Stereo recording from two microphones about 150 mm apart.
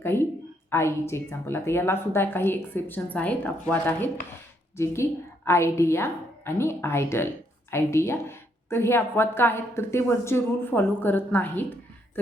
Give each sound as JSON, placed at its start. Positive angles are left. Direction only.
{"t": 0.0, "sound": "a woman's voice", "side_deg": 15}
{"t": 5.5, "sound": "a woman's voice", "side_deg": 15}